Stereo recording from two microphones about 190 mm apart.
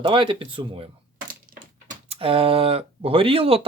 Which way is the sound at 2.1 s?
30° right (ahead or behind).